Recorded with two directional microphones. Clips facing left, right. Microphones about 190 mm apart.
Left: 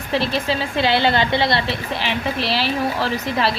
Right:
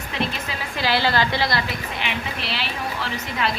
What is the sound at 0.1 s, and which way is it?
A woman's voice, 35° left (ahead or behind).